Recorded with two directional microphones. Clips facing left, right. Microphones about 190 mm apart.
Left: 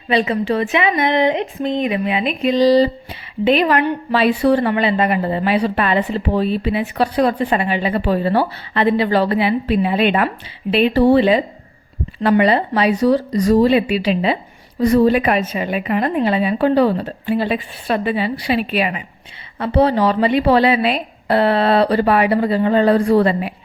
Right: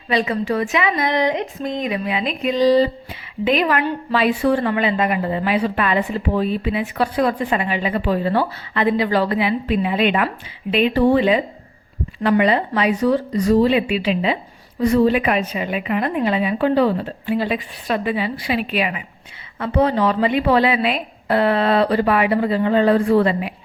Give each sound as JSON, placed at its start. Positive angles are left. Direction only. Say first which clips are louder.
{"t": 0.1, "sound": "speech", "louder": "left 3 dB", "side_deg": 25}
{"t": 2.5, "sound": "a woman's voice", "louder": "left 2 dB", "side_deg": 35}